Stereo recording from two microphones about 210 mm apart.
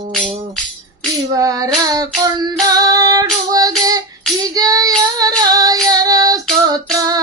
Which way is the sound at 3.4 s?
15° right (ahead or behind).